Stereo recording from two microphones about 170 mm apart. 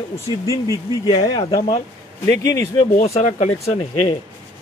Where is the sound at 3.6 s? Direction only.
35° left (ahead or behind).